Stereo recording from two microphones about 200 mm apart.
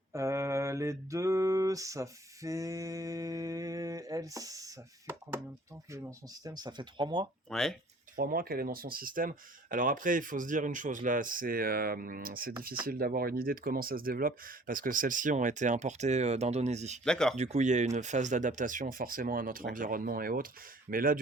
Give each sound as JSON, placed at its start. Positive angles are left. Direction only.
{"t": 0.1, "sound": "mantra", "side_deg": -15}
{"t": 5.9, "sound": "speech", "side_deg": -15}
{"t": 7.5, "sound": "speech", "side_deg": 0}
{"t": 8.1, "sound": "speech", "side_deg": -45}
{"t": 17.0, "sound": "speech", "side_deg": 5}
{"t": 17.3, "sound": "speech", "side_deg": -35}